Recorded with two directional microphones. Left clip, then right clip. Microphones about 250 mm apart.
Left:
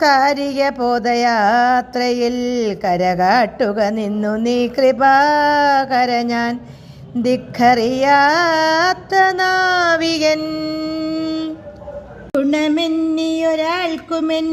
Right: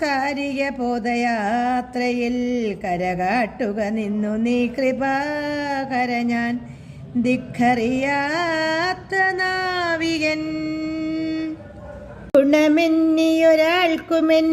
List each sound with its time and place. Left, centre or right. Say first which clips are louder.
0.0 s speech: left 9 dB; centre
12.3 s speech: right 2 dB; centre